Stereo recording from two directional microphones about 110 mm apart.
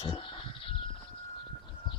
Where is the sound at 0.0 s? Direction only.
50° left (ahead or behind).